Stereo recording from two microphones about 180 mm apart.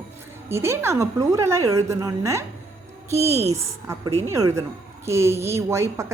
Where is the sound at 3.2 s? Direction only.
35° right (ahead or behind).